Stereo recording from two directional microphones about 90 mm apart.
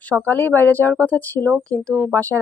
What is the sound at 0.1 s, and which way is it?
A woman's voice, 20° left (ahead or behind).